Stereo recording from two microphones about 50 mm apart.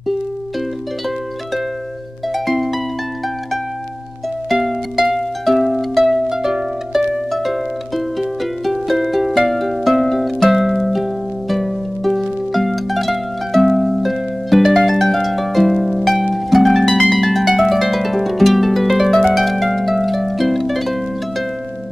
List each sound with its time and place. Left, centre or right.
2.3 s harp: centre
4.6 s music: centre
6.2 s harp: centre